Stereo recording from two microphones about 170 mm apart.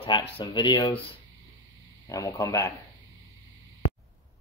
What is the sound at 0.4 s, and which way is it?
Speech, 25° left (ahead or behind).